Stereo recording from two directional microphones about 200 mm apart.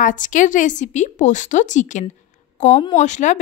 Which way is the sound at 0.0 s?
40° left (ahead or behind).